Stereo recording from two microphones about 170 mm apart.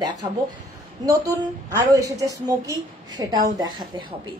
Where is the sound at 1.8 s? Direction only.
20° right (ahead or behind).